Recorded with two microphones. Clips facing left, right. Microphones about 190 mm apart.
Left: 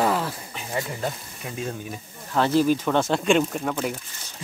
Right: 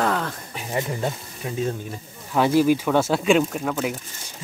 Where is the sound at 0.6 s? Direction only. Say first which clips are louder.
Right 3 dB; 20° right (ahead or behind).